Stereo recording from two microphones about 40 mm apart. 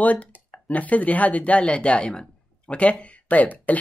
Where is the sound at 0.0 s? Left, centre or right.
Left.